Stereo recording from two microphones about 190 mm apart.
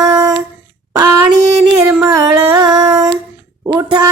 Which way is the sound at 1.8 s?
15° right (ahead or behind).